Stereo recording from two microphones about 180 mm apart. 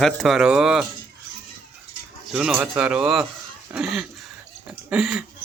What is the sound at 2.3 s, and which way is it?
Speech, 5° right (ahead or behind).